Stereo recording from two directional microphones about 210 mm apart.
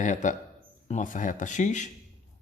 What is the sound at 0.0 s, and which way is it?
A man's voice, 35° left (ahead or behind).